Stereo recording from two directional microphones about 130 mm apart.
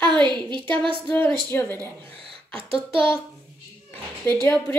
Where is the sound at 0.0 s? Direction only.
35° right (ahead or behind).